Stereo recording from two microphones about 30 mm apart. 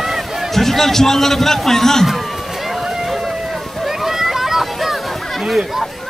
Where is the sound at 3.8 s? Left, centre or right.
Centre.